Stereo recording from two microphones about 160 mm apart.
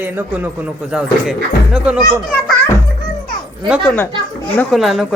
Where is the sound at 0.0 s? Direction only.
15° right (ahead or behind).